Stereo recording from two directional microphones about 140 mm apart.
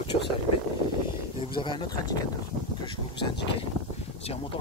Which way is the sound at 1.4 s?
35° left (ahead or behind).